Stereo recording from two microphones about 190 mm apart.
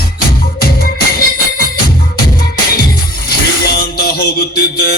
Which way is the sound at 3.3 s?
55° left (ahead or behind).